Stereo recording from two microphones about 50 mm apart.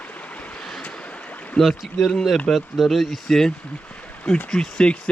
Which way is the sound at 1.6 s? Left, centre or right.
Left.